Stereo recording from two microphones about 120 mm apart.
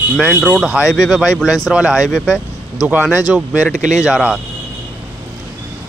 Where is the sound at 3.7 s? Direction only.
90° right.